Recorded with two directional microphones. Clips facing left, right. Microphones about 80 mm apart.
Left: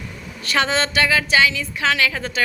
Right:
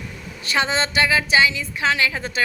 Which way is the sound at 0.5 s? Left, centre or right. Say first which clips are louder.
Left 1 dB; centre.